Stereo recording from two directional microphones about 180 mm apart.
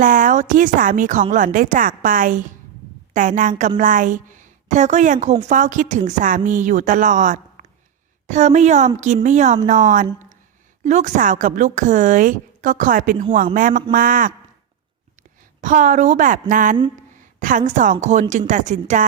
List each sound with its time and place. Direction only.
0.0 s a woman's voice: 50° right (ahead or behind)
15.6 s a woman's voice: 45° right (ahead or behind)